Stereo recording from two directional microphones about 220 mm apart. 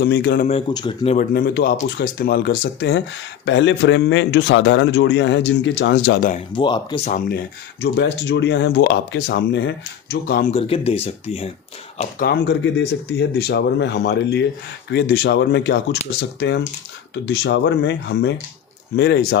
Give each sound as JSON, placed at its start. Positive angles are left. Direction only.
{"t": 0.0, "sound": "speech", "side_deg": 50}
{"t": 0.4, "sound": "speech", "side_deg": 25}
{"t": 1.3, "sound": "a man's voice", "side_deg": 40}
{"t": 6.5, "sound": "speech", "side_deg": 20}
{"t": 7.8, "sound": "speech", "side_deg": 50}
{"t": 10.5, "sound": "speech", "side_deg": 25}
{"t": 12.2, "sound": "speech", "side_deg": 45}